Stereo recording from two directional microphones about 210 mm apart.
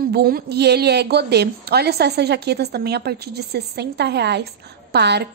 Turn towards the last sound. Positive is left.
turn(degrees=-50)  # may be behind; listen again after turning